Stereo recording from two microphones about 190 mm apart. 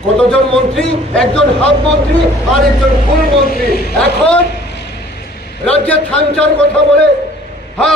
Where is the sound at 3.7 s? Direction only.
55° left (ahead or behind).